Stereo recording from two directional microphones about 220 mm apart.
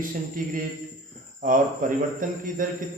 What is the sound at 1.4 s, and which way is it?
Speech, 35° right (ahead or behind).